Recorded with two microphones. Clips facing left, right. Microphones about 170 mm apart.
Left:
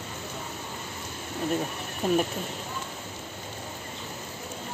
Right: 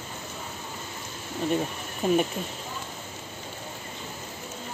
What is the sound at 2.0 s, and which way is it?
Speech, centre (ahead or behind).